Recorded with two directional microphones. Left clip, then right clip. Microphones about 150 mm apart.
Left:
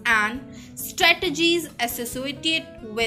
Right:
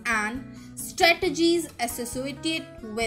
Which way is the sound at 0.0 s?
50° right (ahead or behind).